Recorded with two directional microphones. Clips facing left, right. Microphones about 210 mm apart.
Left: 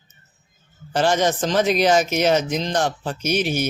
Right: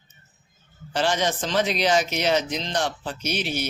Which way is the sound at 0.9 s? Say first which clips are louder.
Left 5 dB; 45° left (ahead or behind).